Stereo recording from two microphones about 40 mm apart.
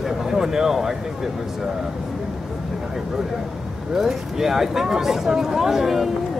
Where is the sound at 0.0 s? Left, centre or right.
Centre.